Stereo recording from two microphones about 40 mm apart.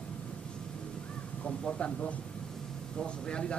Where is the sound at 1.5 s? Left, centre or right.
Left.